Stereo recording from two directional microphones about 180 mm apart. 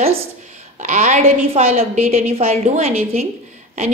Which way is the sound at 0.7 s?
40° right (ahead or behind).